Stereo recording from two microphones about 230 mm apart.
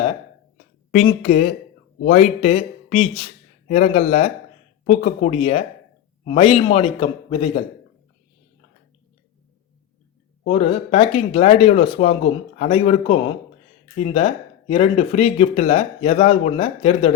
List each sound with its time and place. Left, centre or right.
0.9 s a man's voice: left
10.4 s speech: left